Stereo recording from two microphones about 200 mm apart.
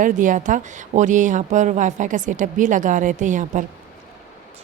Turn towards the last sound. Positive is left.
turn(degrees=-40)  # may be behind; listen again after turning